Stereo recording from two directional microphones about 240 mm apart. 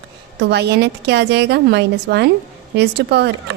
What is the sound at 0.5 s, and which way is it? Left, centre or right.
A woman's voice, right.